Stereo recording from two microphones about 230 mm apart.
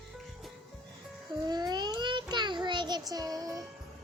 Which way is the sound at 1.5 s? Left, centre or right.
Centre.